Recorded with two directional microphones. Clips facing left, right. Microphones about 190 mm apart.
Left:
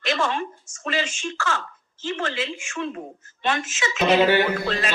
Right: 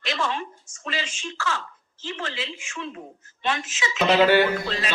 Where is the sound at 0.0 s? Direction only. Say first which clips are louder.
Left 3 dB; 50° left (ahead or behind).